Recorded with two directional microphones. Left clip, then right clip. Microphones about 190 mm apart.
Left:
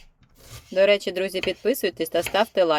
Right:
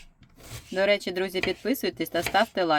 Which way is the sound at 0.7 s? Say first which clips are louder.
Left 5 dB; 20° left (ahead or behind).